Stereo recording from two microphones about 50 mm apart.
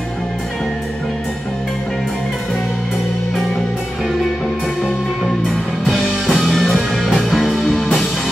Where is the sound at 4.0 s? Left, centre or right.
Centre.